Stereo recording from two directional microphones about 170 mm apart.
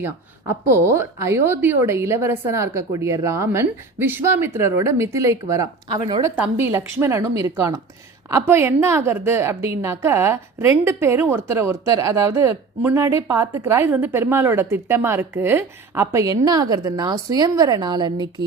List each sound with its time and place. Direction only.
0.7 s a woman's voice: 15° right (ahead or behind)
6.2 s a woman's voice: 10° right (ahead or behind)